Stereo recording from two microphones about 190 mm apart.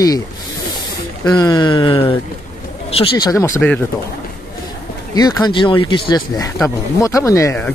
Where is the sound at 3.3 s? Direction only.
15° left (ahead or behind).